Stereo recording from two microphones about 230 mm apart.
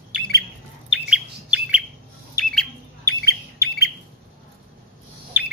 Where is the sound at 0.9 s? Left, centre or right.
Centre.